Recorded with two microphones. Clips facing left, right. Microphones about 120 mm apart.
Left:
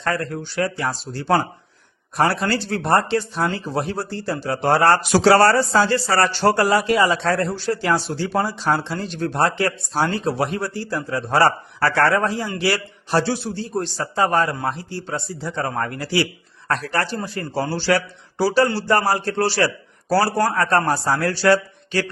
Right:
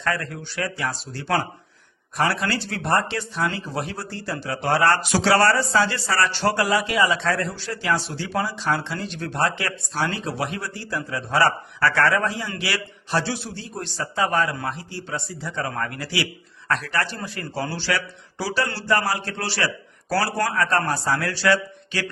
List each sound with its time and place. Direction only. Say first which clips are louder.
0.0 s speech: left 3 dB; 35° left (ahead or behind)